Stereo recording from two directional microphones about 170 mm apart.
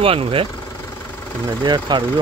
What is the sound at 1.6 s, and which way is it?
Speech, 25° right (ahead or behind).